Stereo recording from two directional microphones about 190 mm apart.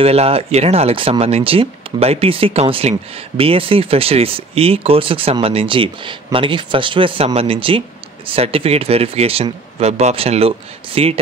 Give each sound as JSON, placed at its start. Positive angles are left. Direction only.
{"t": 0.0, "sound": "speech", "side_deg": -30}